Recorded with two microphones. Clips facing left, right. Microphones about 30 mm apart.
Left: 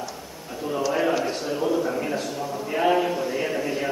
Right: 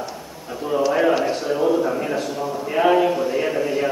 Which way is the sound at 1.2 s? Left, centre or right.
Centre.